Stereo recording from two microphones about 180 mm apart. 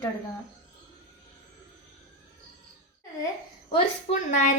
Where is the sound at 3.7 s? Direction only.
30° left (ahead or behind).